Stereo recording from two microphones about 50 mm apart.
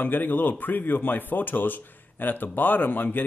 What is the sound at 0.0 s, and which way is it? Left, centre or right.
Speech, left.